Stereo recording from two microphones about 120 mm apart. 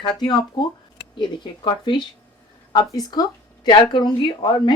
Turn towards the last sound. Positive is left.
turn(degrees=40)  # may be behind; listen again after turning